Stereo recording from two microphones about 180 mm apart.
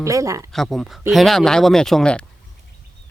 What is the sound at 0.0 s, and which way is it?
Speech, 15° right (ahead or behind).